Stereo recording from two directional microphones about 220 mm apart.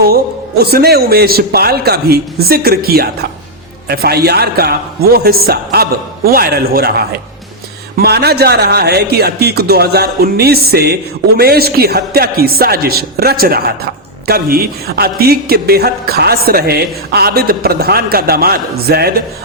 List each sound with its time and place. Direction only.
0.6 s speech: 45° right (ahead or behind)